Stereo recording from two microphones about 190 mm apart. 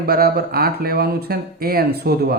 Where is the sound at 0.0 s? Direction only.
55° right (ahead or behind).